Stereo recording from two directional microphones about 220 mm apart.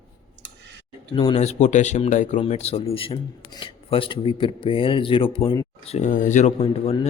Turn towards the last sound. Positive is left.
turn(degrees=25)  # may be behind; listen again after turning